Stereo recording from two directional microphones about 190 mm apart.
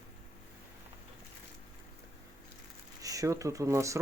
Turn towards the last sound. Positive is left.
turn(degrees=-15)  # may be behind; listen again after turning